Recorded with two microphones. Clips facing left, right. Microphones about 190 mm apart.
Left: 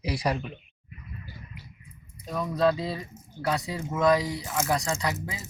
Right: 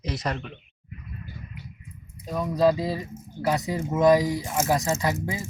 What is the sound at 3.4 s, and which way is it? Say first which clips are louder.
Speech: right 4 dB; 20° right (ahead or behind).